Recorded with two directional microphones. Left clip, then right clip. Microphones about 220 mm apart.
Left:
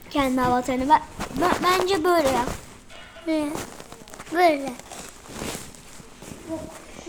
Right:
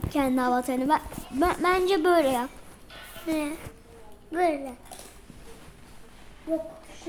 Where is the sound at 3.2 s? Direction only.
25° left (ahead or behind).